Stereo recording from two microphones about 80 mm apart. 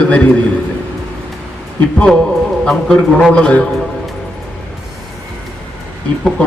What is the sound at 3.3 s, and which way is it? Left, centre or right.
Speech, centre.